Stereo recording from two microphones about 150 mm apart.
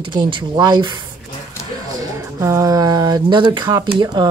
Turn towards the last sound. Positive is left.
turn(degrees=-30)  # may be behind; listen again after turning